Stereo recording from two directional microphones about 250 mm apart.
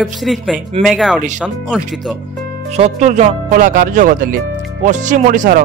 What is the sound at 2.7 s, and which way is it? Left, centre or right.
Speech, right.